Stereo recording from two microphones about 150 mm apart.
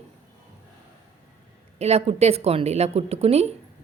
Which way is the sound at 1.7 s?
45° right (ahead or behind).